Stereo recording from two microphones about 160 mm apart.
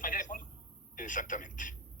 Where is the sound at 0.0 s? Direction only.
55° left (ahead or behind).